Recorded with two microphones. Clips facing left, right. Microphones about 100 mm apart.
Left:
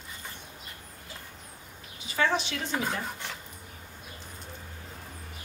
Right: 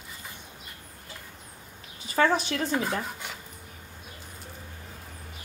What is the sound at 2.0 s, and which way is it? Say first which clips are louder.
Speech: right 4 dB; 40° right (ahead or behind).